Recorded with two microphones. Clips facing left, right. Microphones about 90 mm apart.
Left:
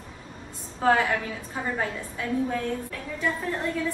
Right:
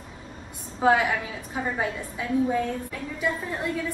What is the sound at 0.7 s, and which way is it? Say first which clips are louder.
A woman's voice: right 1 dB; 10° right (ahead or behind).